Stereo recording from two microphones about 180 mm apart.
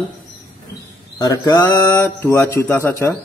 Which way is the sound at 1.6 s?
10° left (ahead or behind).